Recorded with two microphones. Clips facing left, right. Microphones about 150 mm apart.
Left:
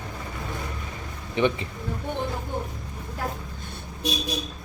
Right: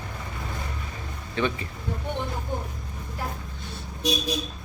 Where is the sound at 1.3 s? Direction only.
20° left (ahead or behind).